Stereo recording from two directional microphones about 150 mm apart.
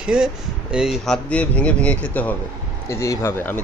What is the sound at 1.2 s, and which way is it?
Speech, 10° left (ahead or behind).